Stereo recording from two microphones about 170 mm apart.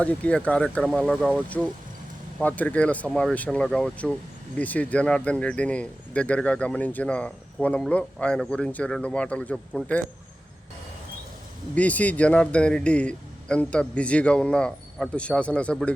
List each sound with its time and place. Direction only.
0.0 s speech: 10° left (ahead or behind)
11.7 s speech: 10° left (ahead or behind)